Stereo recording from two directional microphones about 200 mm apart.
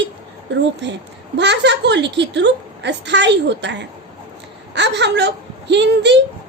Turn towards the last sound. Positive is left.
turn(degrees=-60)  # may be behind; listen again after turning